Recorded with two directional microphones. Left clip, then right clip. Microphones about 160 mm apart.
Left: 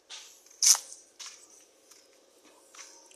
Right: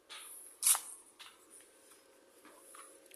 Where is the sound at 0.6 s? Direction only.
55° left (ahead or behind).